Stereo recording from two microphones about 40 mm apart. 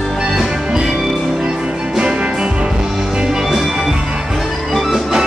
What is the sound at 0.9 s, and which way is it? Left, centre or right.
Music, centre.